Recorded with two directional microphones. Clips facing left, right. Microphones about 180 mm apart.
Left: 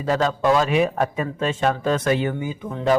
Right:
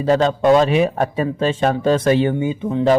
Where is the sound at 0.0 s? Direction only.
30° right (ahead or behind).